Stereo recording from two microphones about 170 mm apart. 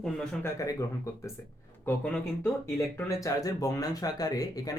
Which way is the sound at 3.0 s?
20° left (ahead or behind).